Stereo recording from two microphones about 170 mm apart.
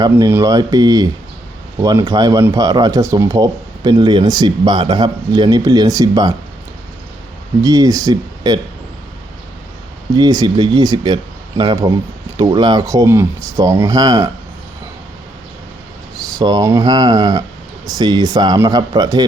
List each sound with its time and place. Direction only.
0.3 s speech: 15° right (ahead or behind)
7.6 s speech: 20° right (ahead or behind)
10.2 s speech: 25° right (ahead or behind)
16.4 s speech: 20° right (ahead or behind)